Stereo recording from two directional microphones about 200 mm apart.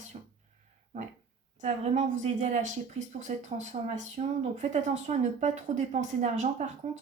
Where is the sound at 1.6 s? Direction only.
35° right (ahead or behind).